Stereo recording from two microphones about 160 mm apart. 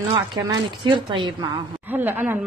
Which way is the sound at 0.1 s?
20° right (ahead or behind).